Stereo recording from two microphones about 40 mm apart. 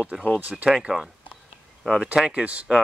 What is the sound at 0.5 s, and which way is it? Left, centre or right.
Speech, right.